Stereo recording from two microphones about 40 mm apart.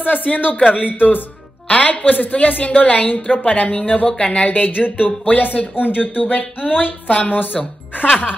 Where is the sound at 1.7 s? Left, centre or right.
Left.